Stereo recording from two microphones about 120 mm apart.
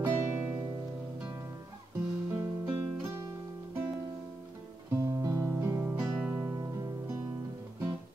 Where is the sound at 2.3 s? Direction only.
15° right (ahead or behind).